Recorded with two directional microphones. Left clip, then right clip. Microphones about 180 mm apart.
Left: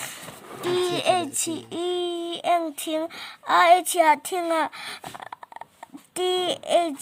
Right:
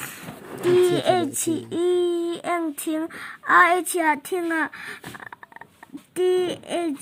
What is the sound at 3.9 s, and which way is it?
Speech, 35° left (ahead or behind).